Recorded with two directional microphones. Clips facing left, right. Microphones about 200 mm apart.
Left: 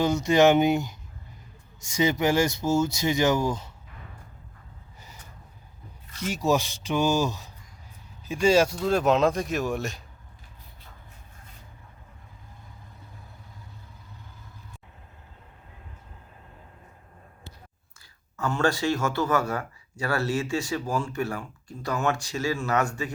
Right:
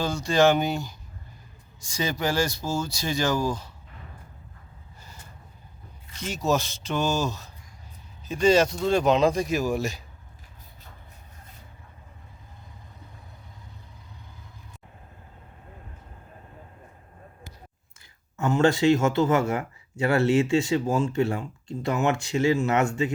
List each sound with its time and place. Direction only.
0.0 s speech: 20° left (ahead or behind)
6.2 s speech: 15° left (ahead or behind)
18.3 s a man's voice: 20° right (ahead or behind)